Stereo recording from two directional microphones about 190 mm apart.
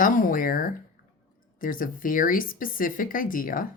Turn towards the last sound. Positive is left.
turn(degrees=45)  # may be behind; listen again after turning